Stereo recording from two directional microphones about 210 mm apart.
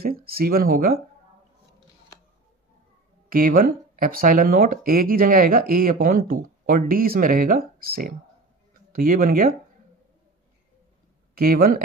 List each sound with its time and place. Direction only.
0.0 s speech: 45° right (ahead or behind)
3.3 s speech: 40° right (ahead or behind)
11.3 s speech: 45° right (ahead or behind)